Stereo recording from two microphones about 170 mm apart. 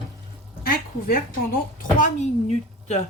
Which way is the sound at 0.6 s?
60° left (ahead or behind).